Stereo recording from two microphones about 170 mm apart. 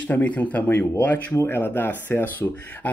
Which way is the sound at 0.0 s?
10° left (ahead or behind).